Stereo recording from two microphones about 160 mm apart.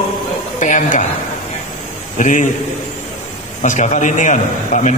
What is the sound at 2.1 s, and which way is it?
Speech, 55° left (ahead or behind).